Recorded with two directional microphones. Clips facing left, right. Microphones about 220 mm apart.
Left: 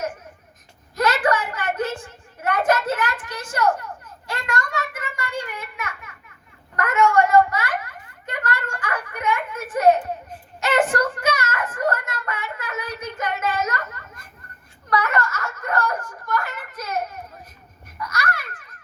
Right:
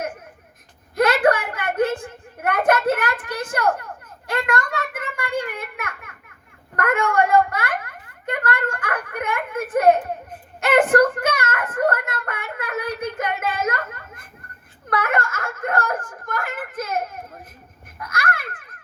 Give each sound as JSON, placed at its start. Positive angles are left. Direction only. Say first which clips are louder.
{"t": 0.9, "sound": "a sound", "louder": "right 3 dB", "side_deg": -55}
{"t": 14.8, "sound": "wail", "louder": "even", "side_deg": -50}
{"t": 18.0, "sound": "babbling", "louder": "right 1 dB", "side_deg": -55}